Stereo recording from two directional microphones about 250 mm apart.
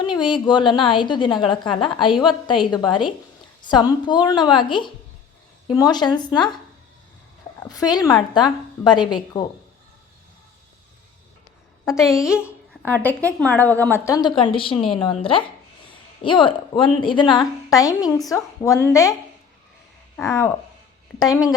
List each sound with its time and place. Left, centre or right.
0.0 s a woman's voice: centre
7.6 s a woman's voice: centre
12.2 s a sound: centre
12.9 s a woman's voice: centre
20.1 s a woman's voice: centre